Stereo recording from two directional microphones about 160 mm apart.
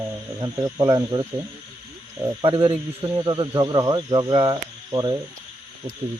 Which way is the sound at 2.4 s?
30° right (ahead or behind).